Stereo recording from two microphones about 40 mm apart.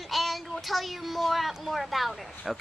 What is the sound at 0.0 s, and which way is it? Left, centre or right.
Child singing, centre.